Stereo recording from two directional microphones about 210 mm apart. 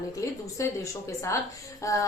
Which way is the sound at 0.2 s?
15° left (ahead or behind).